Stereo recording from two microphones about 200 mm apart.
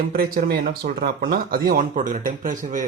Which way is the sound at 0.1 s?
50° right (ahead or behind).